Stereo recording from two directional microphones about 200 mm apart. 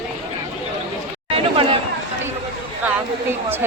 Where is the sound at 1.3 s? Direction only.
30° right (ahead or behind).